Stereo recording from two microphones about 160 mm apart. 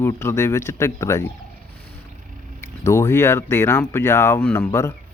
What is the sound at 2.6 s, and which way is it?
Speech, 15° left (ahead or behind).